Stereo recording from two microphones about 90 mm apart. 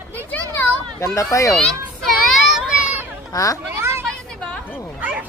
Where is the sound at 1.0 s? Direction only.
35° left (ahead or behind).